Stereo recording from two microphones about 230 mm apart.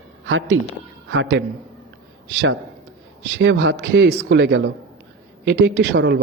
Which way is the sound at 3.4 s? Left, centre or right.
Right.